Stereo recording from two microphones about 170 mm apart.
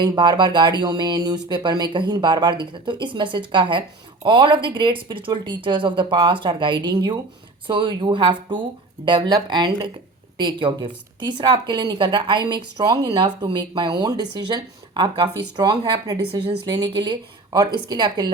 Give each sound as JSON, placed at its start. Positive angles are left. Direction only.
{"t": 0.0, "sound": "speech", "side_deg": -25}